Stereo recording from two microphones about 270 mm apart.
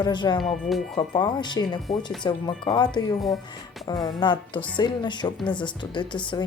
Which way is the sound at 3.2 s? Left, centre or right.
Centre.